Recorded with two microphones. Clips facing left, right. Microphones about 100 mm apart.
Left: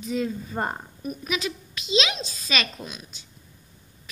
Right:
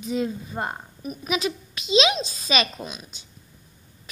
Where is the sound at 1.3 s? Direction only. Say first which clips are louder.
Right 5 dB; 20° right (ahead or behind).